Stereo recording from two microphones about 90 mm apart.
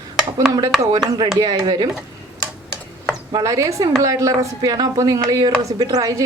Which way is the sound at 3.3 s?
40° right (ahead or behind).